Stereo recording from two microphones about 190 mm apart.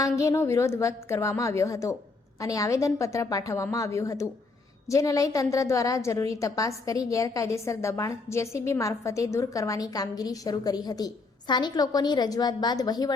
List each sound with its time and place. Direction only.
0.0 s a woman's voice: 15° left (ahead or behind)